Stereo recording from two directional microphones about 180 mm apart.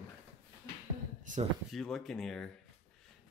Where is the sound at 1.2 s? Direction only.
45° right (ahead or behind).